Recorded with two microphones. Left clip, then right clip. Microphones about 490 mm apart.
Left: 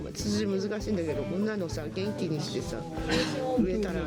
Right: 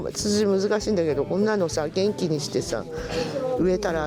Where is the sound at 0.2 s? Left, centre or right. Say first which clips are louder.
Right 9 dB; right.